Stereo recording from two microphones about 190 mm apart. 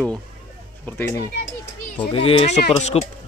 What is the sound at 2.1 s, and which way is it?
Speech, 30° left (ahead or behind).